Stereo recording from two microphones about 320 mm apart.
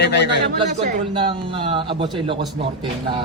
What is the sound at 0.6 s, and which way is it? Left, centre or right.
A man's voice, centre.